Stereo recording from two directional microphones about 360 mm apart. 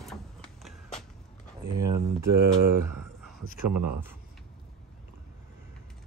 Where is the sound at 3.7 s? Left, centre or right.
Right.